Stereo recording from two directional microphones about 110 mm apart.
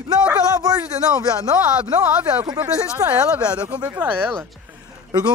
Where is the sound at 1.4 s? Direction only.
35° right (ahead or behind).